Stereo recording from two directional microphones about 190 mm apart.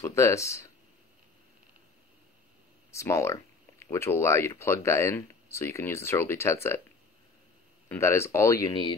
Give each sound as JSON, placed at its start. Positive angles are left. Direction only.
{"t": 0.0, "sound": "speech", "side_deg": 15}
{"t": 2.9, "sound": "speech", "side_deg": 15}
{"t": 7.9, "sound": "speech", "side_deg": 15}